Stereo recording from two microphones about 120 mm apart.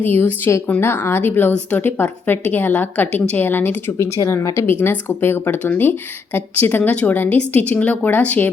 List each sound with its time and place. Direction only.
0.0 s a woman's voice: 15° left (ahead or behind)